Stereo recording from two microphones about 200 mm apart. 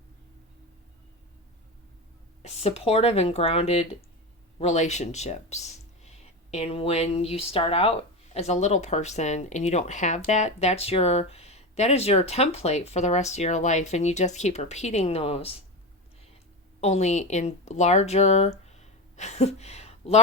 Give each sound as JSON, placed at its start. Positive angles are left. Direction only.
{"t": 2.4, "sound": "speech", "side_deg": 30}
{"t": 16.8, "sound": "a woman's voice", "side_deg": 35}